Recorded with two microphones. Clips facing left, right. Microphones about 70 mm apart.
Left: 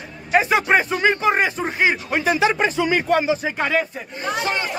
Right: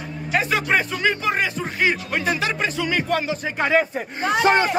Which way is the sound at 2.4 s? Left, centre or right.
Left.